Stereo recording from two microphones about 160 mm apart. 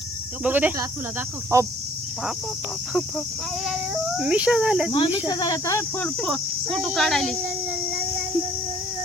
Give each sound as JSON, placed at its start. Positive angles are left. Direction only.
{"t": 0.4, "sound": "speech", "side_deg": -10}
{"t": 3.7, "sound": "speech", "side_deg": -5}
{"t": 4.9, "sound": "speech", "side_deg": 35}
{"t": 6.0, "sound": "speech", "side_deg": 5}